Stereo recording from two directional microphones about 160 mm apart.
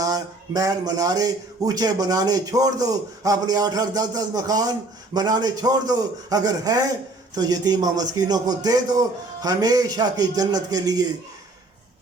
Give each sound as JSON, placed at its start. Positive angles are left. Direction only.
{"t": 0.0, "sound": "speech", "side_deg": -20}